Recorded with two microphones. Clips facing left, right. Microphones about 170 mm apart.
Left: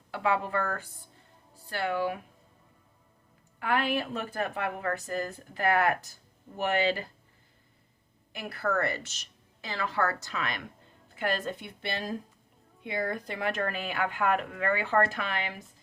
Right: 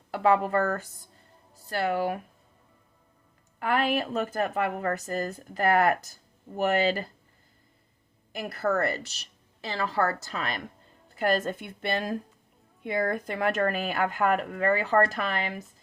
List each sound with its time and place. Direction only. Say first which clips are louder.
0.1 s speech: right 6 dB; 40° right (ahead or behind)
3.6 s speech: right 3 dB; 40° right (ahead or behind)
8.3 s speech: right 4 dB; 40° right (ahead or behind)